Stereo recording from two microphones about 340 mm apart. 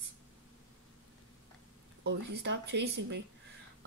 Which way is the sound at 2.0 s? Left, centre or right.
Right.